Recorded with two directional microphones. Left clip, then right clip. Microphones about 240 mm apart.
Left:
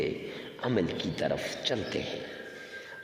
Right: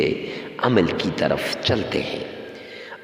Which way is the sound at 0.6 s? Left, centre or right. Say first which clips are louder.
Right 11 dB; right.